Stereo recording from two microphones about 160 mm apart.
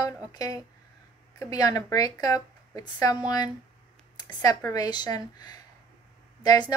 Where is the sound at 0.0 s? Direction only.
25° left (ahead or behind).